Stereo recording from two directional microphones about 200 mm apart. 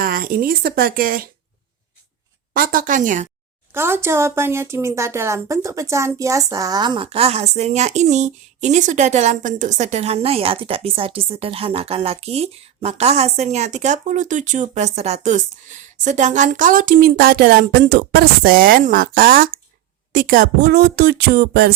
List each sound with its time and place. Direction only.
0.0 s speech: 45° right (ahead or behind)
2.5 s speech: 45° right (ahead or behind)
3.7 s speech: 10° right (ahead or behind); by 21.7 s 50° right (ahead or behind)